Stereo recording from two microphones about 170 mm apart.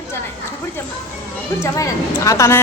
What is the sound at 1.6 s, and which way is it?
Speech, 20° left (ahead or behind).